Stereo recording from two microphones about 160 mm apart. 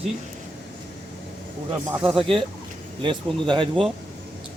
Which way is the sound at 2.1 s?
35° right (ahead or behind).